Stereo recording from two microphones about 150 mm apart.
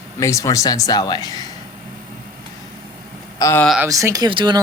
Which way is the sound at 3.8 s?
20° right (ahead or behind).